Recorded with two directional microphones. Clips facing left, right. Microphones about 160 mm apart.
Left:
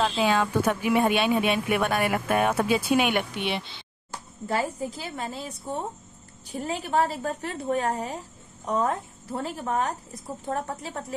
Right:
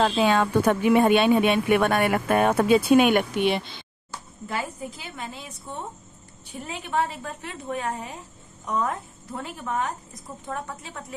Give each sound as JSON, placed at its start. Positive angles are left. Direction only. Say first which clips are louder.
{"t": 0.0, "sound": "speech", "louder": "right 3 dB", "side_deg": -50}
{"t": 4.5, "sound": "a woman's voice", "louder": "left 4 dB", "side_deg": 35}